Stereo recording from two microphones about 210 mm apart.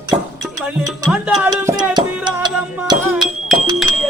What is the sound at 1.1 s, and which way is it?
Music, 5° right (ahead or behind).